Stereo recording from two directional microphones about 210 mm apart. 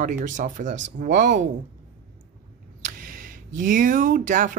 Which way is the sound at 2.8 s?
40° right (ahead or behind).